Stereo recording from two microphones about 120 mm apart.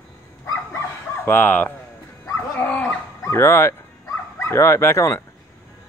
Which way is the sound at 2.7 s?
10° left (ahead or behind).